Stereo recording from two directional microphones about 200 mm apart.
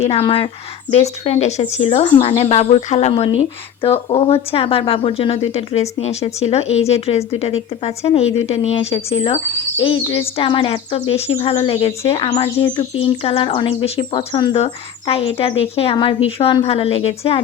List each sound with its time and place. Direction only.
0.0 s speech: 30° left (ahead or behind)